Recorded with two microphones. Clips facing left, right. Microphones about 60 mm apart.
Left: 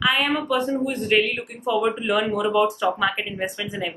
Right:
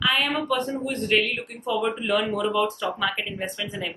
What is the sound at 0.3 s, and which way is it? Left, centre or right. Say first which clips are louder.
A woman's voice: left 3 dB; centre.